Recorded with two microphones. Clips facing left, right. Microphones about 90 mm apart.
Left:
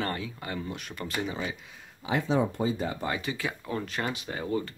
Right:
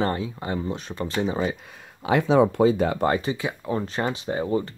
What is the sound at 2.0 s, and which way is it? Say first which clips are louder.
Speech: right 8 dB; 80° right.